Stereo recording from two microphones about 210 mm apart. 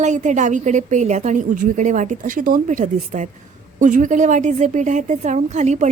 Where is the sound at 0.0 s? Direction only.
35° right (ahead or behind).